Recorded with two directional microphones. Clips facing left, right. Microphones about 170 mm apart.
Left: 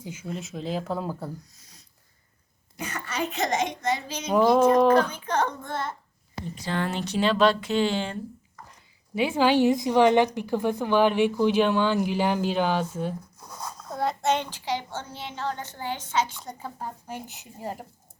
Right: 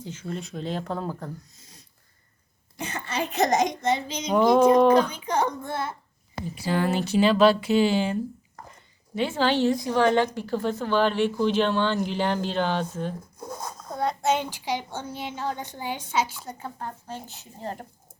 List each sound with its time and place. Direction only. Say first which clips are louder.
0.0 s speech: right 1 dB; 10° left (ahead or behind)
2.7 s a child's voice: right 1 dB; 30° right (ahead or behind)
3.8 s a child's voice: right 2 dB; 20° right (ahead or behind)
9.1 s a woman's voice: left 2 dB; 10° left (ahead or behind)